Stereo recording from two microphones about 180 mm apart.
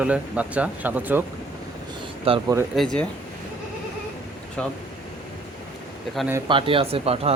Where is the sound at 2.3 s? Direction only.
30° right (ahead or behind).